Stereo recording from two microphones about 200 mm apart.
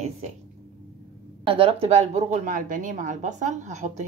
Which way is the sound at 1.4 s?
25° right (ahead or behind).